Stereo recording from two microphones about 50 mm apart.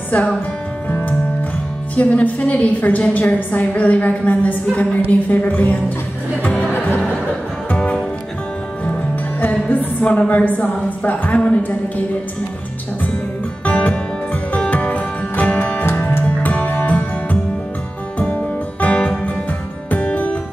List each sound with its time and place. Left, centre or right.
0.8 s music: left
2.0 s a woman's voice: left
7.7 s music: centre
9.4 s music: left
10.0 s a woman's voice: left
13.7 s music: left
18.8 s music: left